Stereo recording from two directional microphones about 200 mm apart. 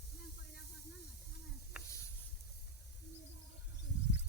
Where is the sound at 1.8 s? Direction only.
5° right (ahead or behind).